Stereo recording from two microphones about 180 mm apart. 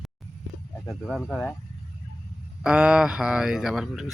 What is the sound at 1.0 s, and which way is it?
Speech, 5° left (ahead or behind).